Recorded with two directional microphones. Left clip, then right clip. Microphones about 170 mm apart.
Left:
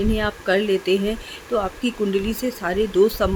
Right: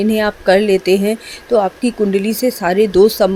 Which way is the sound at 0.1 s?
35° right (ahead or behind).